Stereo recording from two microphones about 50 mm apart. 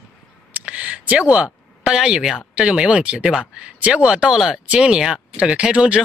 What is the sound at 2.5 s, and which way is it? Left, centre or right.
A woman's voice, centre.